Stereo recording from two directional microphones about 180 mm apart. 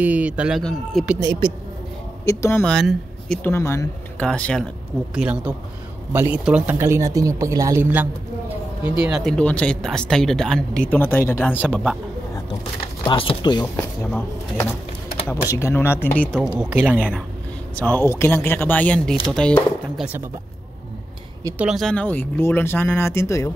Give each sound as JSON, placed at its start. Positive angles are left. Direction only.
{"t": 0.0, "sound": "speech", "side_deg": -5}
{"t": 1.2, "sound": "speech", "side_deg": -25}
{"t": 2.2, "sound": "speech", "side_deg": 15}
{"t": 2.7, "sound": "speech", "side_deg": 0}
{"t": 3.4, "sound": "speech", "side_deg": 15}
{"t": 5.1, "sound": "speech", "side_deg": -5}
{"t": 13.0, "sound": "speech", "side_deg": 30}
{"t": 15.2, "sound": "speech", "side_deg": 15}
{"t": 16.5, "sound": "speech", "side_deg": -5}
{"t": 17.7, "sound": "speech", "side_deg": 10}
{"t": 21.5, "sound": "speech", "side_deg": -5}